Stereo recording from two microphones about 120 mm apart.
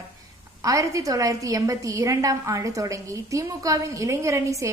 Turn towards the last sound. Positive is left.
turn(degrees=-25)  # may be behind; listen again after turning